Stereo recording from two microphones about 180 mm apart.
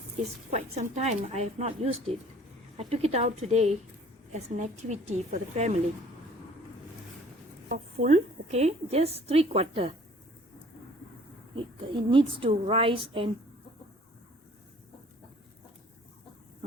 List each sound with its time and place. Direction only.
0.5 s a woman's voice: 35° right (ahead or behind)
7.7 s a woman's voice: 40° right (ahead or behind)
11.5 s a woman's voice: 30° right (ahead or behind)